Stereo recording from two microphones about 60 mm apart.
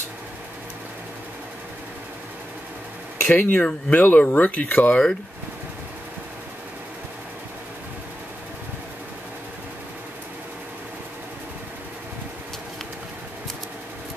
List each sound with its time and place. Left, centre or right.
3.2 s speech: left